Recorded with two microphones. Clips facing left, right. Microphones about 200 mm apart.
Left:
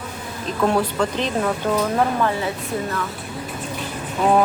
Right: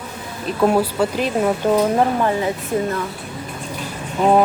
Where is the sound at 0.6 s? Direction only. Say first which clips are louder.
Right 3 dB; 10° right (ahead or behind).